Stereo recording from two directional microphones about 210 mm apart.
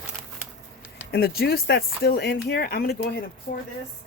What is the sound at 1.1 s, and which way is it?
Speech, 50° left (ahead or behind).